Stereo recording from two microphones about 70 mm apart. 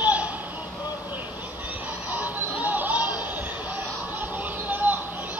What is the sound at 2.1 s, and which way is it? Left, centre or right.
Music, right.